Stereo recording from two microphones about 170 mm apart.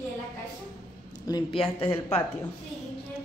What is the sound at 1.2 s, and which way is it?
Speech, 25° left (ahead or behind).